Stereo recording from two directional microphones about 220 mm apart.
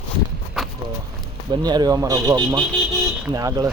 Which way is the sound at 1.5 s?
20° right (ahead or behind).